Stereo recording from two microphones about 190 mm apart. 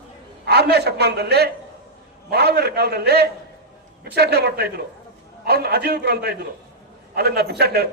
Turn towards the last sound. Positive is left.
turn(degrees=-55)  # may be behind; listen again after turning